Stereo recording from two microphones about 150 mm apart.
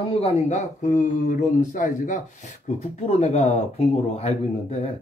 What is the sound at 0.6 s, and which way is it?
Speech, 60° left (ahead or behind).